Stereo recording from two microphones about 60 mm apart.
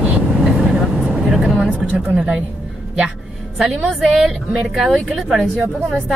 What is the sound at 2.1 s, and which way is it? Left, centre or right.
Speech, centre.